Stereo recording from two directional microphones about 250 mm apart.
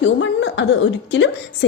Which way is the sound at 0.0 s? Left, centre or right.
Left.